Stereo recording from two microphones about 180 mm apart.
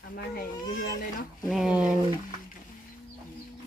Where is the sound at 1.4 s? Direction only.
5° right (ahead or behind).